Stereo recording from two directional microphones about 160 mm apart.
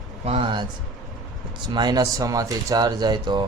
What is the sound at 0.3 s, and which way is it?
Speech, 30° right (ahead or behind).